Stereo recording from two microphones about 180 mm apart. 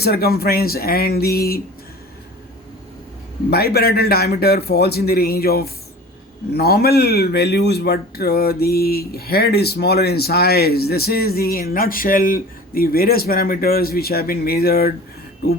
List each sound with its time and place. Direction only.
0.0 s speech: 60° left (ahead or behind)
3.5 s speech: 60° left (ahead or behind)